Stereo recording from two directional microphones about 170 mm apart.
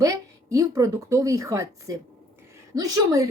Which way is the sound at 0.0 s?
20° right (ahead or behind).